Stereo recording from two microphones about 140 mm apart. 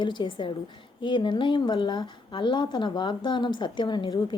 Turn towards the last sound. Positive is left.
turn(degrees=35)  # may be behind; listen again after turning